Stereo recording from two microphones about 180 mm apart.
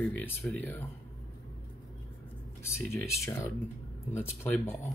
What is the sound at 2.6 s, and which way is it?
Speech, 15° left (ahead or behind).